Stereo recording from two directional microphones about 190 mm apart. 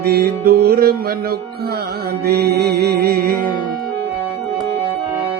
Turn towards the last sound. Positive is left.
turn(degrees=-50)  # may be behind; listen again after turning